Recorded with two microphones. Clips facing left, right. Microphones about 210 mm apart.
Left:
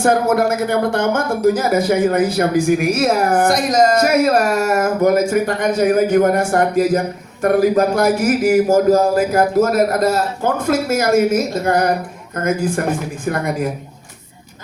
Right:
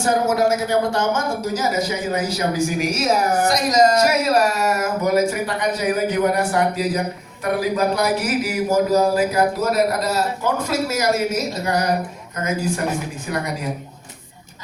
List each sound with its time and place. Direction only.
0.0 s speech: 55° left (ahead or behind)